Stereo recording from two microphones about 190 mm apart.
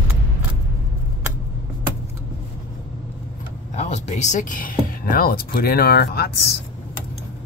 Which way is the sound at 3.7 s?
35° left (ahead or behind).